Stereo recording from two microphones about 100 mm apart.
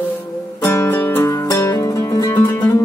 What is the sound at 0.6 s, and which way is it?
Music, 30° left (ahead or behind).